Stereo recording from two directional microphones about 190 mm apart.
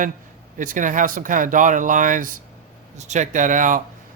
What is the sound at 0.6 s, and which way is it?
Speech, 45° right (ahead or behind).